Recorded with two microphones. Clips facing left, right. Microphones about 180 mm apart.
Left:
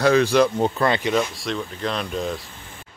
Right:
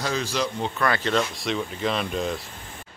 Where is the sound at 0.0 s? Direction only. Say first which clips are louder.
Left 10 dB; 60° left (ahead or behind).